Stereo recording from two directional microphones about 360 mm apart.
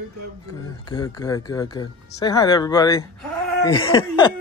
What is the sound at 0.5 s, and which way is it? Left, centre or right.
Speech, centre.